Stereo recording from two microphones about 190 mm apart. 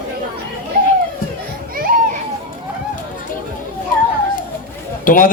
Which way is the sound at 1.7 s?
50° right (ahead or behind).